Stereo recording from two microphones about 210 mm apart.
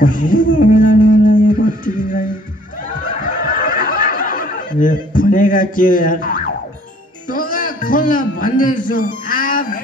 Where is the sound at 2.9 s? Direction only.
40° left (ahead or behind).